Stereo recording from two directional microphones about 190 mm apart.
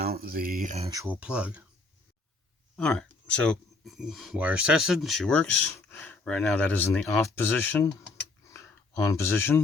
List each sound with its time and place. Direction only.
0.0 s speech: 50° right (ahead or behind)
0.9 s speech: 15° right (ahead or behind)
2.7 s speech: 5° left (ahead or behind)
9.2 s speech: 10° left (ahead or behind)